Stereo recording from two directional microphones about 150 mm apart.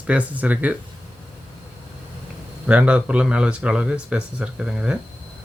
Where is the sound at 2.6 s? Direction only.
10° right (ahead or behind).